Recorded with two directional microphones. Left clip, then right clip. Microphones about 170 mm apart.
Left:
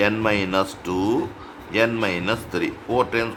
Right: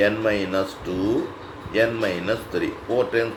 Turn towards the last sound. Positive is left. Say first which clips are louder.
# even
turn(degrees=30)  # may be behind; listen again after turning